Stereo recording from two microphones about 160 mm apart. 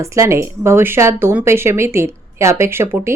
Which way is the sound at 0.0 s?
20° right (ahead or behind).